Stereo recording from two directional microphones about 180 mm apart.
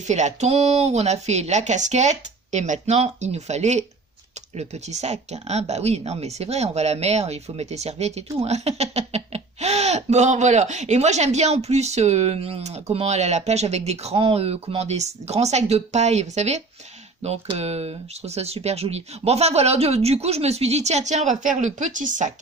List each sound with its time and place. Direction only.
0.1 s speech: 40° right (ahead or behind)